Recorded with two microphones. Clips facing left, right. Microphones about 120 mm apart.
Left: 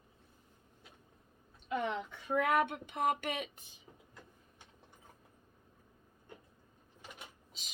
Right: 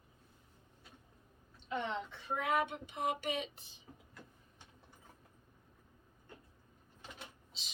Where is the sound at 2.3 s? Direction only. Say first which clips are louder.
Left 4 dB; 55° left (ahead or behind).